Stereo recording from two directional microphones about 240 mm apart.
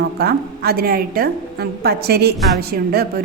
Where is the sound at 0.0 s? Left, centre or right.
Right.